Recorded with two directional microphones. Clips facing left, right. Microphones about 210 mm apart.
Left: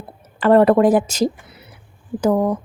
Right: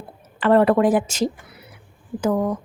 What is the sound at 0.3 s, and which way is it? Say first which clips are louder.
Speech: left 3 dB; 40° left (ahead or behind).